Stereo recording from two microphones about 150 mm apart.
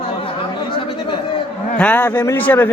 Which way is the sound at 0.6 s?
30° left (ahead or behind).